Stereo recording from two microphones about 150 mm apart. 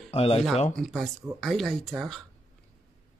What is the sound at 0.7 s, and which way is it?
Speech, centre (ahead or behind).